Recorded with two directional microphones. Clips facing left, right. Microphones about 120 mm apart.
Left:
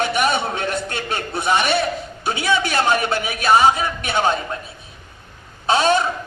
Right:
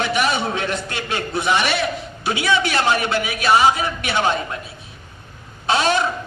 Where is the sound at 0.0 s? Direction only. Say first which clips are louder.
Left 1 dB; 45° left (ahead or behind).